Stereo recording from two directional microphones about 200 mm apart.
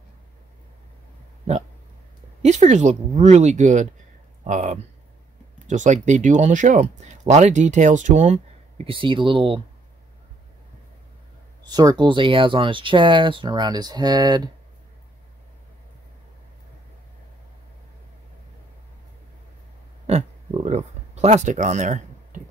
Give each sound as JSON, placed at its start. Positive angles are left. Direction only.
{"t": 2.4, "sound": "speech", "side_deg": -35}
{"t": 11.7, "sound": "speech", "side_deg": -20}
{"t": 20.1, "sound": "speech", "side_deg": -35}